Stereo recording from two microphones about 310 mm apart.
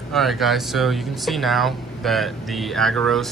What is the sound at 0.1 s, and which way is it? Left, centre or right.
Speech, centre.